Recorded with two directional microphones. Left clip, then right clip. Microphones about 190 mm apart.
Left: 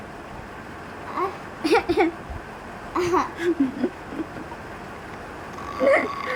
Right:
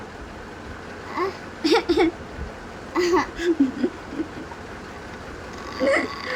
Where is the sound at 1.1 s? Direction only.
5° left (ahead or behind).